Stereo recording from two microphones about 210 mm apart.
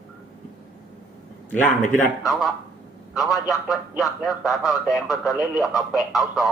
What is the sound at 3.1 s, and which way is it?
A man's voice, centre (ahead or behind).